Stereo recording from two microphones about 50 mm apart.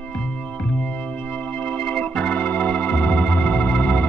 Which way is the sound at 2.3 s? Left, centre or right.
Left.